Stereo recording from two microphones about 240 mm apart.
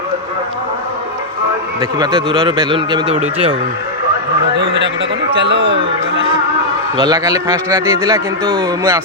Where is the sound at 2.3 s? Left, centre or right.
Right.